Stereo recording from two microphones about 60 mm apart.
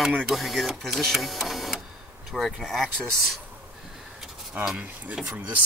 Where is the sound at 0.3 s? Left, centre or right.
Centre.